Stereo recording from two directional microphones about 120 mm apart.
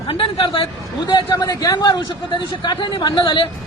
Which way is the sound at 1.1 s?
35° left (ahead or behind).